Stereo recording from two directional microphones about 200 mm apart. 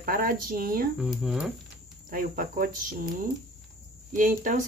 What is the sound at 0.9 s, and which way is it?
Speech, 5° right (ahead or behind).